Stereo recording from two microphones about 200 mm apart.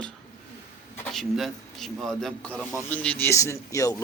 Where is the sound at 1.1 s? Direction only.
Centre (ahead or behind).